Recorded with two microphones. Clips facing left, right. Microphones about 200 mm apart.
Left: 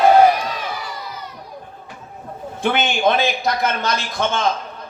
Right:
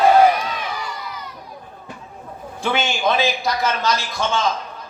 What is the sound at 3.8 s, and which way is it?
Speech, 55° left (ahead or behind).